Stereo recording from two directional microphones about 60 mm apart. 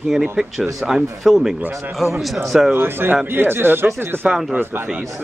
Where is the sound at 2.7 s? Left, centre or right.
Right.